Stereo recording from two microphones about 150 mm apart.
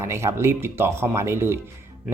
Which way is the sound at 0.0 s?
20° right (ahead or behind).